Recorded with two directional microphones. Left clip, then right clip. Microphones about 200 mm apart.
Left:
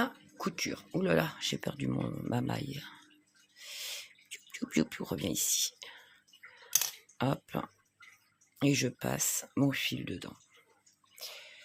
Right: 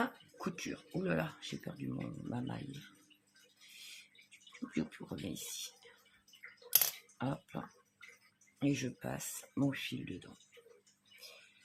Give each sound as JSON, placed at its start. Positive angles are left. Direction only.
{"t": 0.0, "sound": "speech", "side_deg": 50}
{"t": 4.3, "sound": "speech", "side_deg": 60}
{"t": 7.2, "sound": "speech", "side_deg": 60}